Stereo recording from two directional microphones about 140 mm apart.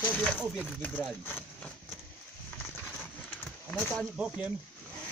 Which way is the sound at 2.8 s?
10° left (ahead or behind).